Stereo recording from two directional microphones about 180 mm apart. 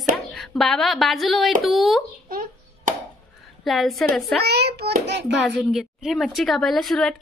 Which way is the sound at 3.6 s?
Centre (ahead or behind).